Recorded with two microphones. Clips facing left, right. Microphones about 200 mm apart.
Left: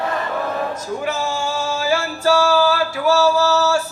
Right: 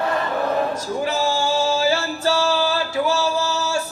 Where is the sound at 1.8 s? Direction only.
25° right (ahead or behind).